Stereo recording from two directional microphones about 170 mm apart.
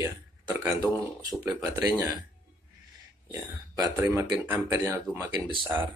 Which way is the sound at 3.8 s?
20° right (ahead or behind).